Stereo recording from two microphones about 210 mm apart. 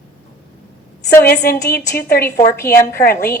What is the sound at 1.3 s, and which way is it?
A woman's voice, 45° left (ahead or behind).